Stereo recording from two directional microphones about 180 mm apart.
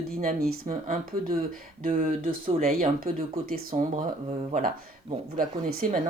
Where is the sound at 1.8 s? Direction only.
50° right (ahead or behind).